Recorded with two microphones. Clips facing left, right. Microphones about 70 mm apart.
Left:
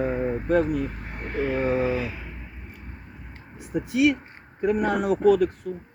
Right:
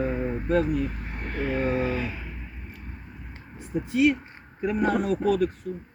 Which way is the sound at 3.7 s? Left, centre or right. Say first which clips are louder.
Left 2 dB; left.